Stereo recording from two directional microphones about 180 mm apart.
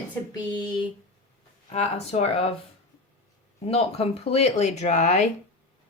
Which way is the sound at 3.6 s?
35° left (ahead or behind).